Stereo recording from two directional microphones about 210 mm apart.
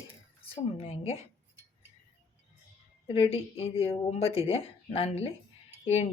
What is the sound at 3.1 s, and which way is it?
Speech, 25° left (ahead or behind).